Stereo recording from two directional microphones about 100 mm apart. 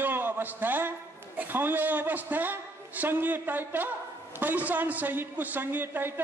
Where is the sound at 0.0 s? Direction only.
20° right (ahead or behind).